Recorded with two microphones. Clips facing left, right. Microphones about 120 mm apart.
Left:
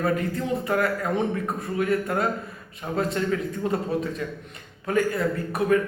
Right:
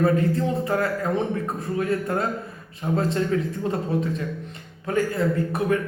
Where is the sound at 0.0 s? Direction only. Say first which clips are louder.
Right 4 dB; 30° right (ahead or behind).